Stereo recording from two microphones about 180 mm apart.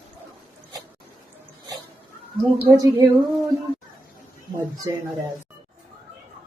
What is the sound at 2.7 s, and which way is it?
Speech, 15° right (ahead or behind).